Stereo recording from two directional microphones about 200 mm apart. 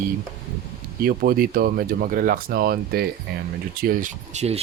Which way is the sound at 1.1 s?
50° right (ahead or behind).